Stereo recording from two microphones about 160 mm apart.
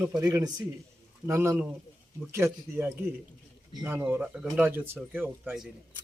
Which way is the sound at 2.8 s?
15° right (ahead or behind).